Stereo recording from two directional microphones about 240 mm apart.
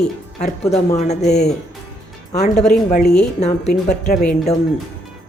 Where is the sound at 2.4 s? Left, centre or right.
Left.